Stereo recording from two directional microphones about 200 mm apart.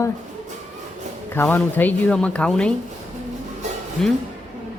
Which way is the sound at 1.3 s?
10° left (ahead or behind).